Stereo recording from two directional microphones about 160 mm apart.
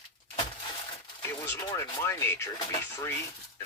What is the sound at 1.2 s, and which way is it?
Speech, 15° left (ahead or behind).